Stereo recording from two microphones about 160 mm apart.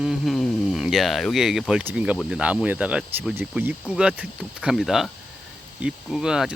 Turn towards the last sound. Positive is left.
turn(degrees=-5)  # may be behind; listen again after turning